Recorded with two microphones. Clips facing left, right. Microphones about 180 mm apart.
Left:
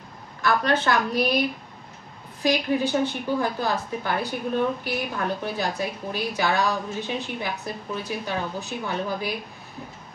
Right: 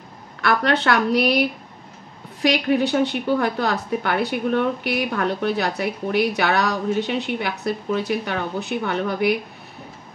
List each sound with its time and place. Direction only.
0.4 s a woman's voice: 70° right (ahead or behind)
2.4 s a woman's voice: 70° right (ahead or behind)